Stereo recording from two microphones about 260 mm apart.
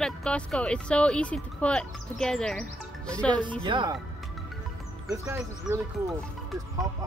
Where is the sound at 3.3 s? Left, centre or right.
Centre.